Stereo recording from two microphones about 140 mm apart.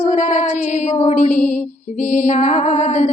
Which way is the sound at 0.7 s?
55° left (ahead or behind).